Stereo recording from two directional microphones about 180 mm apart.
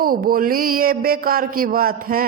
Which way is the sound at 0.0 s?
55° right (ahead or behind).